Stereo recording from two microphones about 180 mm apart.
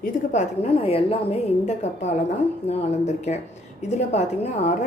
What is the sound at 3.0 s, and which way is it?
A woman's voice, 40° left (ahead or behind).